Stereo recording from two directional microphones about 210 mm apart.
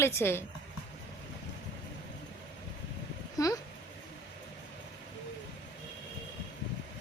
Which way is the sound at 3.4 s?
15° left (ahead or behind).